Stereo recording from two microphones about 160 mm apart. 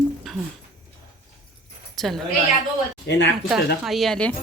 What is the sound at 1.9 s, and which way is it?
Speech, centre (ahead or behind).